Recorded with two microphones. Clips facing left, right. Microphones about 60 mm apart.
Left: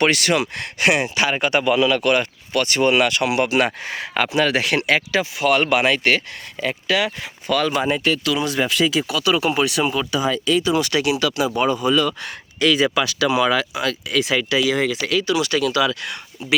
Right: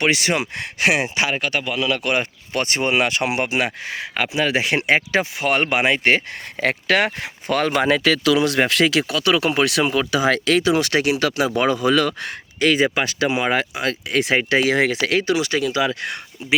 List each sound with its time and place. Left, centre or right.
0.0 s speech: centre
0.8 s speech: centre
1.4 s speech: centre
2.5 s speech: right
3.6 s speech: centre; by 6.2 s right
6.6 s speech: right
7.9 s speech: right
9.0 s speech: right
11.0 s speech: right
11.5 s speech: right
12.2 s speech: right
14.7 s speech: right
15.2 s speech: right